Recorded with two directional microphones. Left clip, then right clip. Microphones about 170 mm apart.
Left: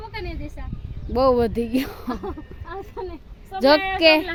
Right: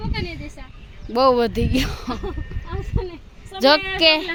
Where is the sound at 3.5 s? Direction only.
10° left (ahead or behind).